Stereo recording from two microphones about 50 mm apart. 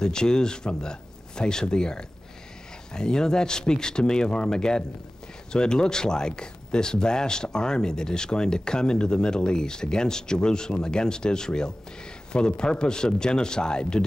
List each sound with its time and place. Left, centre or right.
0.0 s speech: centre